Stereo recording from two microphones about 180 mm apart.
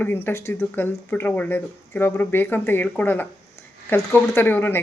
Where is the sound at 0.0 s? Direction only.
10° left (ahead or behind).